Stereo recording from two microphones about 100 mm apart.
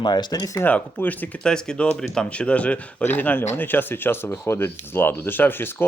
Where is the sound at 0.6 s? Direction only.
15° left (ahead or behind).